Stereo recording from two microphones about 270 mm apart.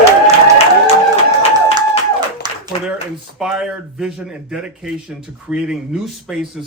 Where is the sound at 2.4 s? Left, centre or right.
Centre.